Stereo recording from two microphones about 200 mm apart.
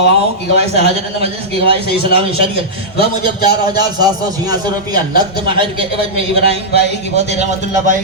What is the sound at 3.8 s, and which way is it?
Speech, 20° right (ahead or behind).